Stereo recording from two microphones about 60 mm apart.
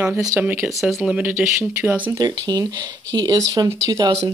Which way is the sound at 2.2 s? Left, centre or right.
Right.